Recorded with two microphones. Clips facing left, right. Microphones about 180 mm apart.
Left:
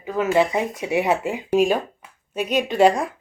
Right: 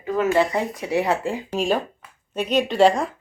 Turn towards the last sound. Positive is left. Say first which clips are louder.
# even
turn(degrees=5)  # may be behind; listen again after turning